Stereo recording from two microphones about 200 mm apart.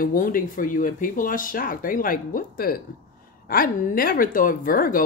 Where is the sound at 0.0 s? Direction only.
45° left (ahead or behind).